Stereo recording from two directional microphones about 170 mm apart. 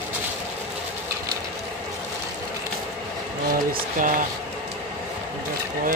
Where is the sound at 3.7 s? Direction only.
50° right (ahead or behind).